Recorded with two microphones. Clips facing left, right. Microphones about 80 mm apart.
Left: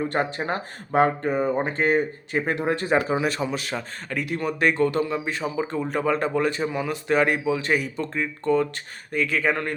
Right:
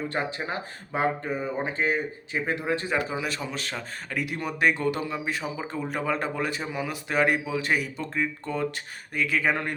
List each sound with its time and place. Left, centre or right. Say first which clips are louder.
0.0 s speech: left 5 dB; left
3.4 s a man's voice: left 6 dB; centre
4.1 s speech: left 4 dB; centre